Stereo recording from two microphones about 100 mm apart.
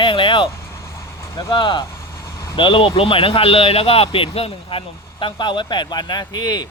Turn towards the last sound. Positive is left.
turn(degrees=40)  # may be behind; listen again after turning